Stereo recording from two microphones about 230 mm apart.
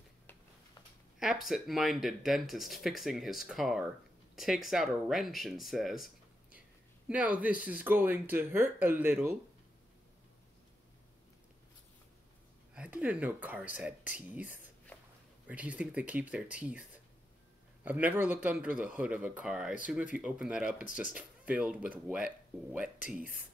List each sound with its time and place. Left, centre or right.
1.2 s speech: centre
7.1 s speech: centre
12.7 s speech: centre
17.8 s speech: centre
20.7 s speech: left
21.1 s speech: centre